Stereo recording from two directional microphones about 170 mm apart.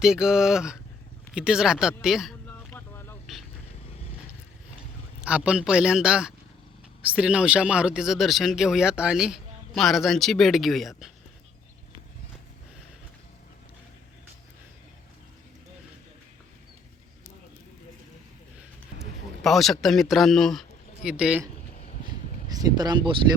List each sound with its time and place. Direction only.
0.0 s speech: 5° right (ahead or behind)
2.5 s vehicle: 10° left (ahead or behind)
5.2 s speech: 5° right (ahead or behind)
19.4 s a man's voice: centre (ahead or behind)
22.4 s speech: 20° right (ahead or behind)